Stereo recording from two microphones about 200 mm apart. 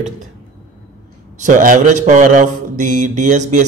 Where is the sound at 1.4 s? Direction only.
40° right (ahead or behind).